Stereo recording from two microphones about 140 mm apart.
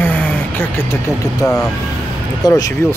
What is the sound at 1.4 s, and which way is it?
Speech, 25° left (ahead or behind).